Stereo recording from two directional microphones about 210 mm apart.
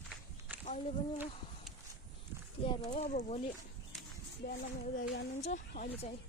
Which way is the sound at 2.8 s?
30° left (ahead or behind).